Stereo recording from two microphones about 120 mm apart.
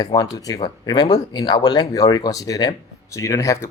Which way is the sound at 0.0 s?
35° left (ahead or behind).